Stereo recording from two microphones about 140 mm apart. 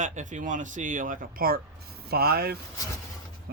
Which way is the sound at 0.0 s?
60° right (ahead or behind).